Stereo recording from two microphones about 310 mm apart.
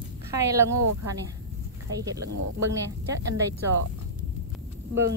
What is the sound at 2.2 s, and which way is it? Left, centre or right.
Speech, right.